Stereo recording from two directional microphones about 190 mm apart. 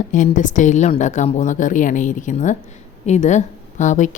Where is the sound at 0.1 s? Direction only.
40° left (ahead or behind).